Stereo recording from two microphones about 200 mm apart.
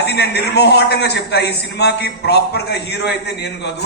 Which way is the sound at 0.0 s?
55° left (ahead or behind).